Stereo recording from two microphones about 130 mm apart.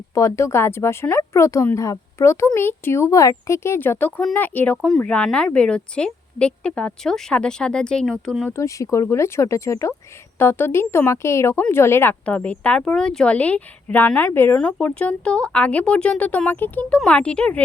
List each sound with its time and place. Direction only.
0.1 s speech: 25° left (ahead or behind); by 8.5 s 5° left (ahead or behind)
8.5 s speech: 25° left (ahead or behind)